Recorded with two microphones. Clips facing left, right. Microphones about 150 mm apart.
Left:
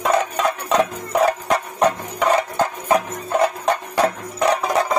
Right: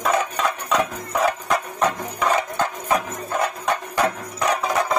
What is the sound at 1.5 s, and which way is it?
Music, 35° left (ahead or behind).